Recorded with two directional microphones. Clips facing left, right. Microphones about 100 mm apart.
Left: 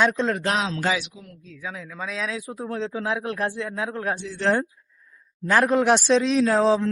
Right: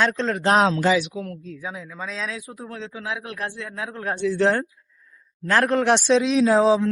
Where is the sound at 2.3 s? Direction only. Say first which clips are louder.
Left 5 dB; 25° left (ahead or behind).